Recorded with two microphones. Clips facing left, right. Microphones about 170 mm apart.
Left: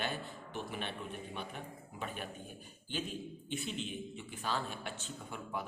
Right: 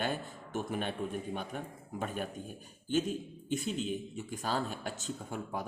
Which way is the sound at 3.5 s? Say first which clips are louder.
Right 7 dB; 40° right (ahead or behind).